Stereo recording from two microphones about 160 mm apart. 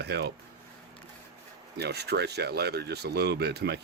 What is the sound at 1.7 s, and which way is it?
Speech, 90° right.